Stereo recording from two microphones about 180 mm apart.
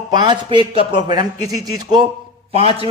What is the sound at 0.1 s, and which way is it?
A man's voice, 25° right (ahead or behind).